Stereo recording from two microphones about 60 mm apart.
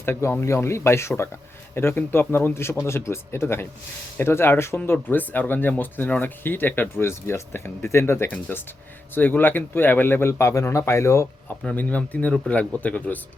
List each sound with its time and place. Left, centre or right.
0.0 s speech: left
4.9 s speech: left
8.3 s speech: left
11.7 s a man's voice: left